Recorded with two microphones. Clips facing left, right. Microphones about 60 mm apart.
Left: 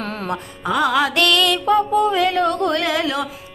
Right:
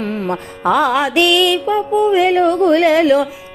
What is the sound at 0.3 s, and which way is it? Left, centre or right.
Music, right.